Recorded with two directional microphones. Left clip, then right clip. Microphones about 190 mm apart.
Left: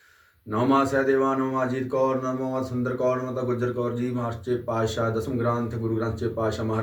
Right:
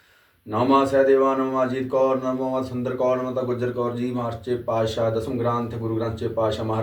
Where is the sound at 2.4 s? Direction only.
20° left (ahead or behind).